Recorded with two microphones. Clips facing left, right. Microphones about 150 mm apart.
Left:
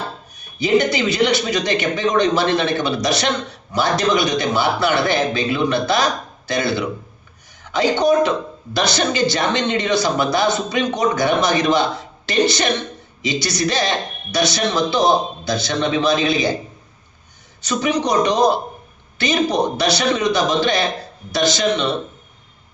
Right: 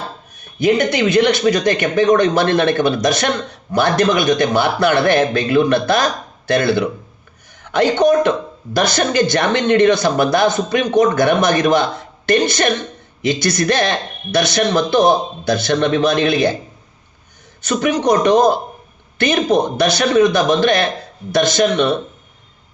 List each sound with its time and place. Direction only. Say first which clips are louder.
0.3 s a man's voice: right 2 dB; 55° right (ahead or behind)
17.6 s a man's voice: right 3 dB; 55° right (ahead or behind)